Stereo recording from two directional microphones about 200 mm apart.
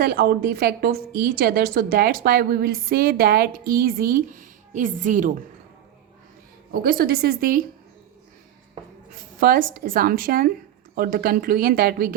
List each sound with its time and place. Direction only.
0.0 s a woman's voice: 45° right (ahead or behind)
6.7 s a woman's voice: 50° right (ahead or behind)
9.4 s a woman's voice: 45° right (ahead or behind)